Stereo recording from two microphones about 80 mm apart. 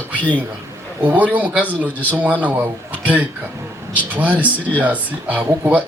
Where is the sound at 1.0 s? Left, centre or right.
Right.